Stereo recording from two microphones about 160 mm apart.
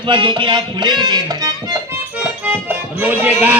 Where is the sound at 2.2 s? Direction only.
10° right (ahead or behind).